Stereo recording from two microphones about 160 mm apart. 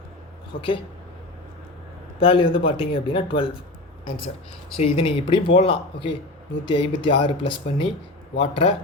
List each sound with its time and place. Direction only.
0.5 s speech: 60° left (ahead or behind)
2.1 s speech: 35° left (ahead or behind)
4.9 s speech: 35° left (ahead or behind)